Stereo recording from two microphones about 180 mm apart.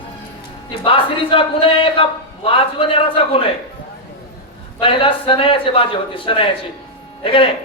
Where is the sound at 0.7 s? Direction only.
30° left (ahead or behind).